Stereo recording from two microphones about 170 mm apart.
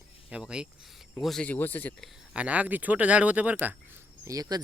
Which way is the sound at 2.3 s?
10° right (ahead or behind).